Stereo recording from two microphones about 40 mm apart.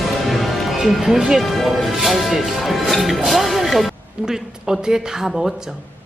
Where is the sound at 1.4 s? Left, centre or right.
Centre.